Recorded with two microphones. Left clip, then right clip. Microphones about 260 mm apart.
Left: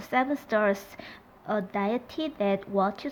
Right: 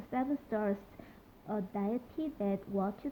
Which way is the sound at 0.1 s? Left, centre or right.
Centre.